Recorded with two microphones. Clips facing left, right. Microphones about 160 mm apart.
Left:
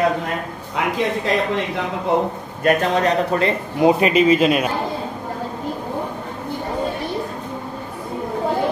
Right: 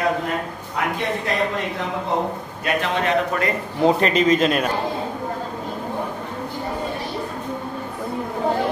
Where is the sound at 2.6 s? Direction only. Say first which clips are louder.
Left 6 dB; 40° left (ahead or behind).